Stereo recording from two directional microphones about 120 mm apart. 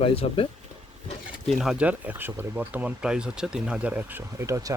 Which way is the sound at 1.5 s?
5° right (ahead or behind).